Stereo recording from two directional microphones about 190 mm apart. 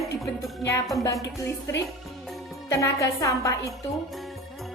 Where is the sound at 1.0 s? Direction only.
15° left (ahead or behind).